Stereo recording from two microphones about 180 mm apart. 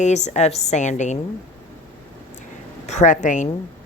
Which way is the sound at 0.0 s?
40° left (ahead or behind).